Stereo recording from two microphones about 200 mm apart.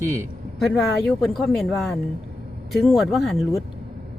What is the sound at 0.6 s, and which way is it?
Speech, centre (ahead or behind).